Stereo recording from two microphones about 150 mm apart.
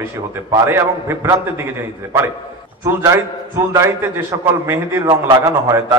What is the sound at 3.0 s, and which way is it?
A man's voice, 20° right (ahead or behind).